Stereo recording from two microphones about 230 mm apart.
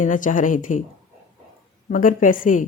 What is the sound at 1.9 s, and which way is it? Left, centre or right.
Speech, left.